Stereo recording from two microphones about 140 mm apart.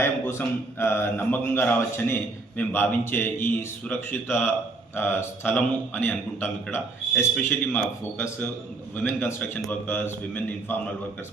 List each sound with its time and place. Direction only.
0.0 s a man's voice: 15° left (ahead or behind)